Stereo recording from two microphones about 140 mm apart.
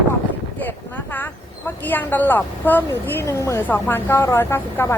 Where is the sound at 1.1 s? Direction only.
15° left (ahead or behind).